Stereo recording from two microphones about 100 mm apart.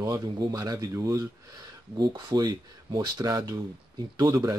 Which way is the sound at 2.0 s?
45° right (ahead or behind).